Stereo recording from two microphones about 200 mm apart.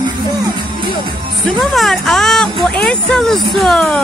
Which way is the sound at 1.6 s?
Centre (ahead or behind).